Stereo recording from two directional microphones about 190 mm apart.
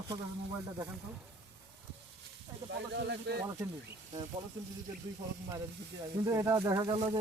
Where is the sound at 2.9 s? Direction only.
65° right (ahead or behind).